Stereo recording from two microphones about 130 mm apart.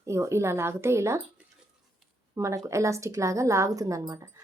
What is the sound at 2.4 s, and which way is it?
A woman's voice, 25° right (ahead or behind).